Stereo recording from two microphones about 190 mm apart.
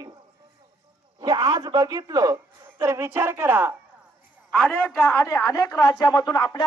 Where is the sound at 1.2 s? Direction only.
20° right (ahead or behind).